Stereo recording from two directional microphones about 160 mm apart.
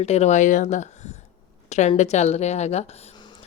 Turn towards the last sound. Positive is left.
turn(degrees=30)  # may be behind; listen again after turning